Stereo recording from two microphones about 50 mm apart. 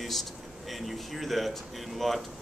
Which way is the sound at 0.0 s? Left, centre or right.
Centre.